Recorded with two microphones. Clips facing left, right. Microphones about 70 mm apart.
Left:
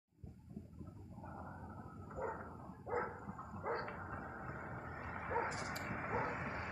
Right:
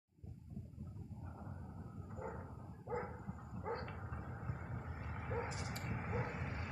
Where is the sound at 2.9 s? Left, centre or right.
Left.